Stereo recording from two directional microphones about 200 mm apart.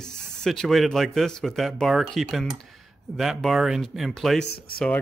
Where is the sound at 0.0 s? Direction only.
Centre (ahead or behind).